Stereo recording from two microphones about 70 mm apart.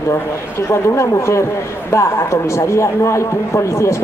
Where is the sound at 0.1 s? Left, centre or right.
Left.